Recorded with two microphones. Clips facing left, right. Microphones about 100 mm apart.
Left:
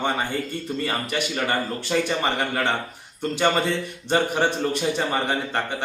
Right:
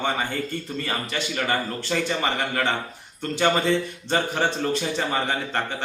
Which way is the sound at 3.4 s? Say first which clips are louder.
Right 1 dB; 15° left (ahead or behind).